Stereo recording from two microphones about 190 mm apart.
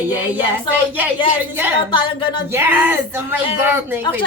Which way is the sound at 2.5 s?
10° right (ahead or behind).